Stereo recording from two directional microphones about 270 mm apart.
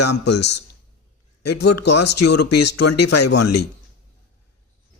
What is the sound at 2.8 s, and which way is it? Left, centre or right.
Speech, left.